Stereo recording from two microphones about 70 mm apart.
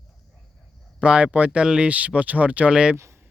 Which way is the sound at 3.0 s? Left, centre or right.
Right.